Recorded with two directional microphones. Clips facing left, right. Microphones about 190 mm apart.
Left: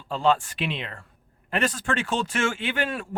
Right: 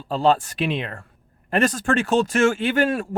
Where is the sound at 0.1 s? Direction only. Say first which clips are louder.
Right 4 dB; 35° right (ahead or behind).